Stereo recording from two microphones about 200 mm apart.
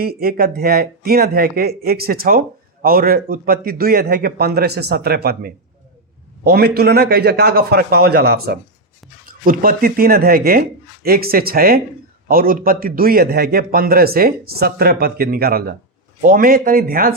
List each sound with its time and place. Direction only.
0.0 s a man's voice: 50° right (ahead or behind)